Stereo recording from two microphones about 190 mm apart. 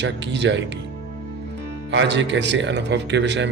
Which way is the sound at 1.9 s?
70° right (ahead or behind).